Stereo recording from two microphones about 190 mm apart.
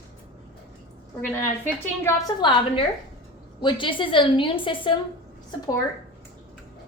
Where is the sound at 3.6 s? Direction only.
25° left (ahead or behind).